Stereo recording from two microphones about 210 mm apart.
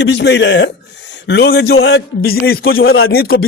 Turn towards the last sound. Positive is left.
turn(degrees=45)  # may be behind; listen again after turning